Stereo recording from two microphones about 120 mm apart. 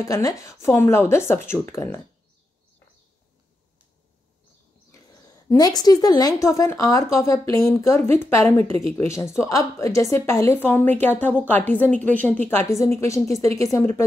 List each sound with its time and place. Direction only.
0.0 s speech: 30° left (ahead or behind)
5.5 s a woman's voice: 30° left (ahead or behind)